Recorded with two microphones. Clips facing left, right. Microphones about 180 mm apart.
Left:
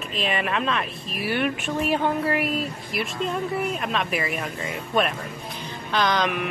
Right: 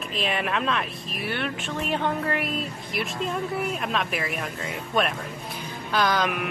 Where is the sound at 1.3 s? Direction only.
10° left (ahead or behind).